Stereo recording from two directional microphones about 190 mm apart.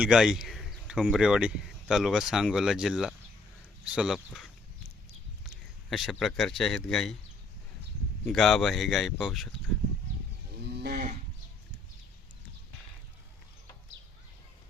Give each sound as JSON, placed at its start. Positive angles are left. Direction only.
{"t": 0.0, "sound": "speech", "side_deg": -5}
{"t": 5.9, "sound": "speech", "side_deg": 0}
{"t": 8.3, "sound": "speech", "side_deg": 0}
{"t": 10.6, "sound": "livestock", "side_deg": -60}